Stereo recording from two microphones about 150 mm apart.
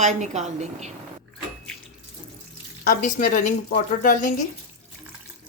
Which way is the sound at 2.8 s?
65° left (ahead or behind).